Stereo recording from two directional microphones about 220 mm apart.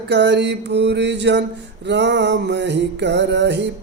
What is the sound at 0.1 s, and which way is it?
Music, 50° right (ahead or behind).